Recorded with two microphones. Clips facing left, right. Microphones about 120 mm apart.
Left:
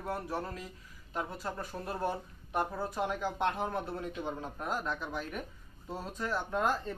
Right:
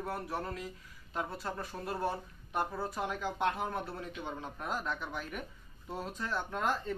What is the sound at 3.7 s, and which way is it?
Speech, 35° left (ahead or behind).